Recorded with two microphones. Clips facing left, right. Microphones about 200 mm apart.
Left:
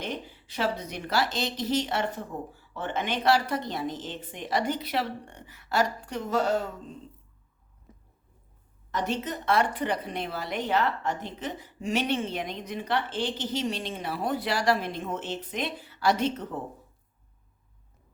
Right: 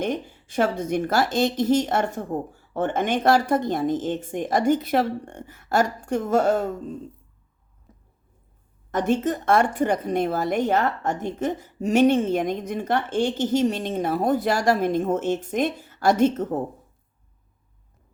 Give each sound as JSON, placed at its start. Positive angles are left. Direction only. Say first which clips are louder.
{"t": 0.0, "sound": "a woman's voice", "louder": "right 8 dB", "side_deg": -50}
{"t": 8.9, "sound": "a woman's voice", "louder": "right 8 dB", "side_deg": -50}